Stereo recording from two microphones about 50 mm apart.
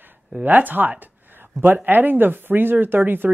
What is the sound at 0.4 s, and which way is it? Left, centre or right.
Speech, right.